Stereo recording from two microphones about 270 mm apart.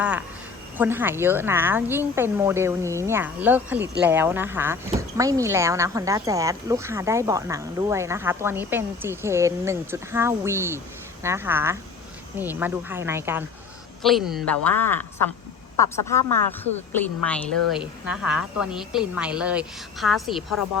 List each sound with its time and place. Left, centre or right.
0.0 s speech: centre